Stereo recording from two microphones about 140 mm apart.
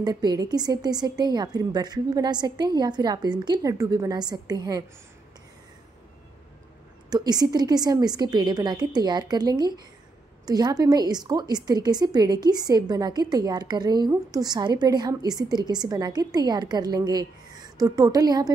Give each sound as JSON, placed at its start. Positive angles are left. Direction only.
{"t": 0.0, "sound": "a woman's voice", "side_deg": -30}
{"t": 7.1, "sound": "a woman's voice", "side_deg": -30}